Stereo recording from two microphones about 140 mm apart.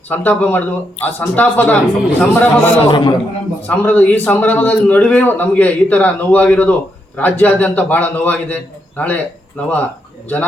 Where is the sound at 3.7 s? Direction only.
10° left (ahead or behind).